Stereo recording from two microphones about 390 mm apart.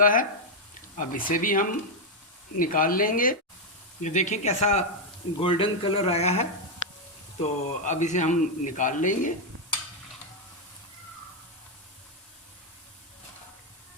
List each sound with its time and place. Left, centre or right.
0.0 s a man's voice: left